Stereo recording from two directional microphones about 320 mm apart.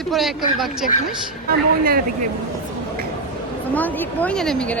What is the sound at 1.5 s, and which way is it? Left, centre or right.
Speech, right.